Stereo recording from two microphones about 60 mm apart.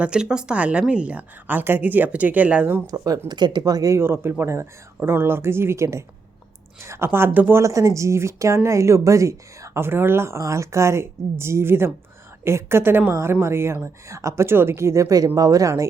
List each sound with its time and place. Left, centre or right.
0.0 s a woman's voice: centre
2.8 s speech: right
3.9 s speech: right
4.9 s speech: right
7.6 s a woman's voice: right
9.7 s speech: right
13.8 s a woman's voice: right
14.4 s speech: right
15.4 s speech: right